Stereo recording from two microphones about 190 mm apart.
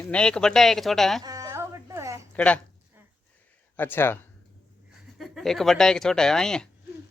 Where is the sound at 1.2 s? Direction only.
20° right (ahead or behind).